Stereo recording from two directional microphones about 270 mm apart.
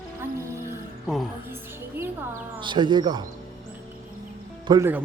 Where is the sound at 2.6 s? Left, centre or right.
Centre.